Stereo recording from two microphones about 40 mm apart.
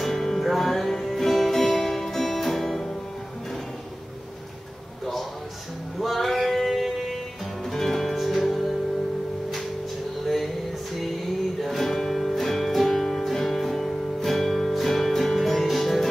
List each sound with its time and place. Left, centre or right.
0.0 s music: centre
5.9 s music: centre
10.2 s a sound: centre
11.6 s music: centre